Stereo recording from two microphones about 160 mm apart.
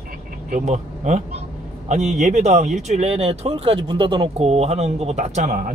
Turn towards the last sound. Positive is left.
turn(degrees=-55)  # may be behind; listen again after turning